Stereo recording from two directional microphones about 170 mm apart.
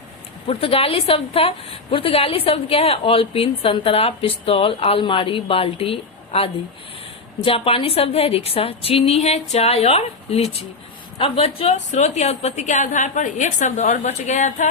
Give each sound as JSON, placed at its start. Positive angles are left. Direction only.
{"t": 0.4, "sound": "a woman's voice", "side_deg": 35}